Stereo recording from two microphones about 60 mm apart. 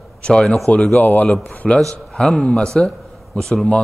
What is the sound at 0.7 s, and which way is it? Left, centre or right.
A man's voice, left.